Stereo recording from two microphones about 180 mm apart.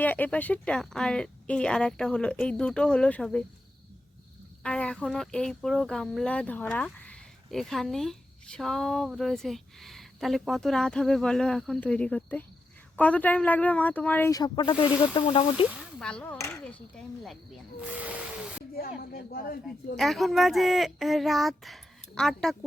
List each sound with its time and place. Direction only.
0.0 s speech: 10° left (ahead or behind)
4.6 s speech: 5° left (ahead or behind); by 15.6 s 30° left (ahead or behind)
15.7 s speech: 5° left (ahead or behind)
17.7 s a sound: 10° right (ahead or behind)
18.8 s speech: 55° left (ahead or behind)
20.0 s speech: centre (ahead or behind)